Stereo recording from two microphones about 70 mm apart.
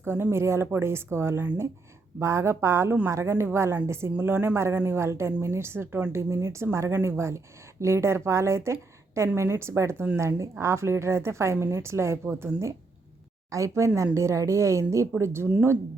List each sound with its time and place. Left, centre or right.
0.0 s a woman's voice: right